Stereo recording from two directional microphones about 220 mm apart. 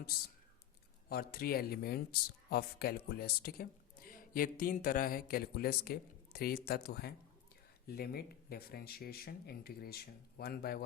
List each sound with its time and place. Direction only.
0.1 s speech: 45° left (ahead or behind)